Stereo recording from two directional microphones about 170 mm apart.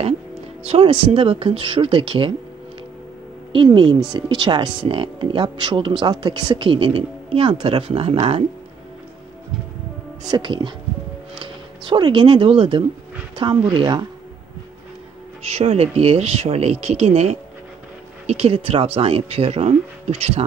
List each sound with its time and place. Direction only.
0.7 s speech: 30° right (ahead or behind)
3.5 s speech: 30° right (ahead or behind)
10.2 s speech: 25° right (ahead or behind)
15.4 s speech: 35° right (ahead or behind)